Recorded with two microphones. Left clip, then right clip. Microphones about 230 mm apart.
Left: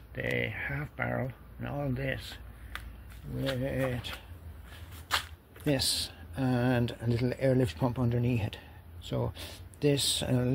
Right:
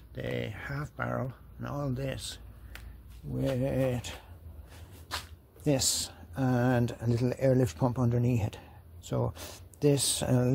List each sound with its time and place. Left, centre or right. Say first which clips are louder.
0.1 s speech: left 4 dB; centre
3.3 s speech: right 2 dB; right
5.1 s a sound: left 7 dB; left
5.7 s speech: even; centre